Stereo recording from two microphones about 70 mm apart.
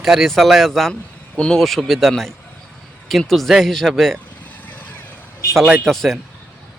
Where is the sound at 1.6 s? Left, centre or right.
Centre.